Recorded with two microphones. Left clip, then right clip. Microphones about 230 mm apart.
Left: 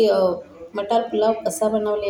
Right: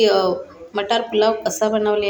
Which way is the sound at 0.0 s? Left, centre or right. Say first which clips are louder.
Right 1 dB; right.